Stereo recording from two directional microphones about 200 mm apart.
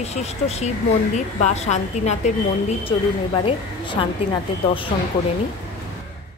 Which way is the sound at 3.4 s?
25° left (ahead or behind).